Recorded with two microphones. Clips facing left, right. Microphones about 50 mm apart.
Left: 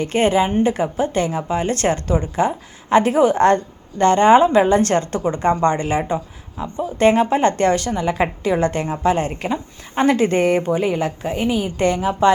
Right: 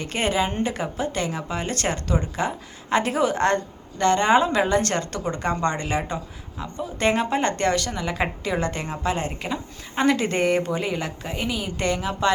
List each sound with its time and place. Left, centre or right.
0.0 s a woman's voice: left
8.6 s a woman's voice: left